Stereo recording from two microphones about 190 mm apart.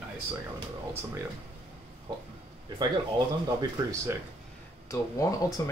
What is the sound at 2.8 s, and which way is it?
Speech, 25° right (ahead or behind).